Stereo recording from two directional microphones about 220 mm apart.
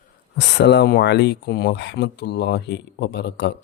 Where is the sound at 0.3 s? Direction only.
50° left (ahead or behind).